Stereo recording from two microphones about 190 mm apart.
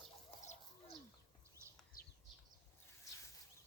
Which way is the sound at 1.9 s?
45° left (ahead or behind).